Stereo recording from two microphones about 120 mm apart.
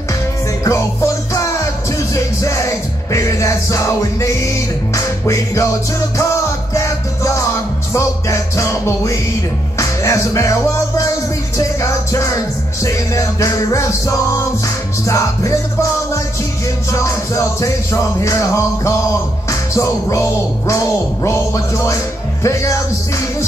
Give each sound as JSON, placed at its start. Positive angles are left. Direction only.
{"t": 0.7, "sound": "music", "side_deg": 25}
{"t": 16.9, "sound": "music", "side_deg": 25}